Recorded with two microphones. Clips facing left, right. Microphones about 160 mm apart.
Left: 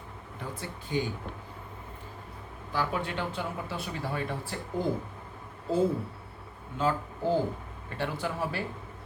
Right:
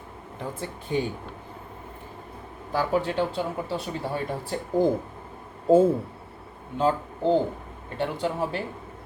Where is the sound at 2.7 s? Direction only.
30° right (ahead or behind).